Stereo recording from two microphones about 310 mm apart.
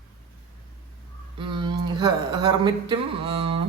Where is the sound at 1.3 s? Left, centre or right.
Centre.